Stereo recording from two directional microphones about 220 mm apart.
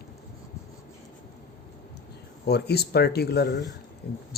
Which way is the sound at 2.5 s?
45° left (ahead or behind).